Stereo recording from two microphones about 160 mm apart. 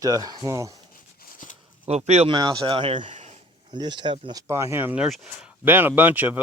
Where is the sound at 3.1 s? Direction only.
45° right (ahead or behind).